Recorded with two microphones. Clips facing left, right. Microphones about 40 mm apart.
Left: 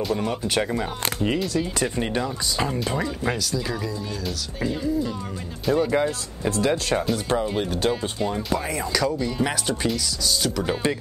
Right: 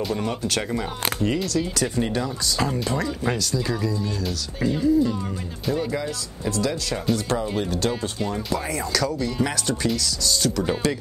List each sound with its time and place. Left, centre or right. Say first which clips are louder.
0.0 s speech: left 1 dB; centre
5.9 s speech: left 5 dB; left
7.1 s speech: even; centre